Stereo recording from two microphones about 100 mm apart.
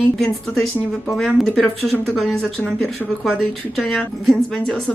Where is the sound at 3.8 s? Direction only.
5° left (ahead or behind).